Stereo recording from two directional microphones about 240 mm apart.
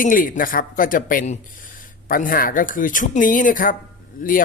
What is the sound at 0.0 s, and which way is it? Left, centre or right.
Speech, left.